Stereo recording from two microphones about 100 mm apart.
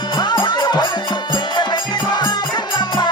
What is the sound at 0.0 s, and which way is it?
Music, 50° left (ahead or behind).